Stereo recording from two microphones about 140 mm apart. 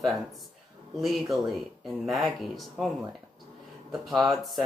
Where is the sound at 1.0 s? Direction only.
Centre (ahead or behind).